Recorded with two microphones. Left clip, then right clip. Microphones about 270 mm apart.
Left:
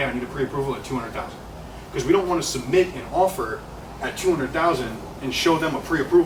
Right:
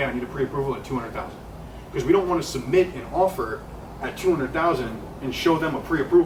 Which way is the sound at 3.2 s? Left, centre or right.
Right.